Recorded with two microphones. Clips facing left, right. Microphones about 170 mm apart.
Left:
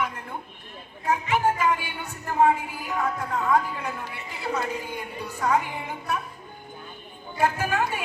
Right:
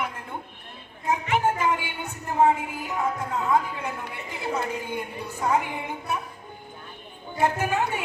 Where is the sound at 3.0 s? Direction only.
20° right (ahead or behind).